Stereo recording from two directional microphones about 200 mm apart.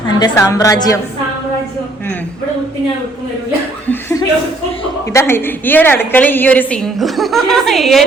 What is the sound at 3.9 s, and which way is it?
Chuckle, 10° left (ahead or behind).